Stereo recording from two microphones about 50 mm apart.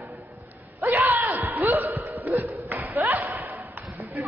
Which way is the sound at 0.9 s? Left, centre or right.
Right.